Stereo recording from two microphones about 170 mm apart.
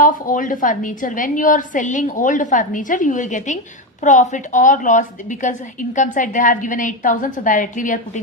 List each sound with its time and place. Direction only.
0.0 s a woman's voice: 50° left (ahead or behind)